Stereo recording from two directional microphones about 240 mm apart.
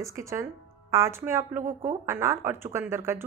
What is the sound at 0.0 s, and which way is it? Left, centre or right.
A woman's voice, centre.